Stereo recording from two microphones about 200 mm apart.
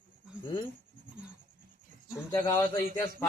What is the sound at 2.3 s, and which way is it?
Speech, 20° left (ahead or behind).